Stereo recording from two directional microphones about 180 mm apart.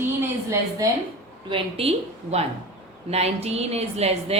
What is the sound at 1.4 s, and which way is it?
A woman's voice, 30° right (ahead or behind).